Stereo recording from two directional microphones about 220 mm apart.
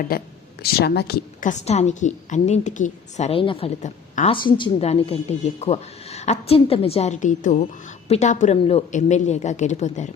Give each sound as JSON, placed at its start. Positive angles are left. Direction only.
{"t": 0.1, "sound": "a woman's voice", "side_deg": 45}
{"t": 4.4, "sound": "a woman's voice", "side_deg": 20}